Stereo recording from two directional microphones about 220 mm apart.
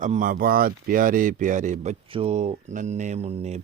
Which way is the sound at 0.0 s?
35° right (ahead or behind).